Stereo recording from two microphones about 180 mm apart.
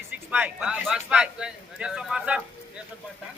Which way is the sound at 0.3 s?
5° right (ahead or behind).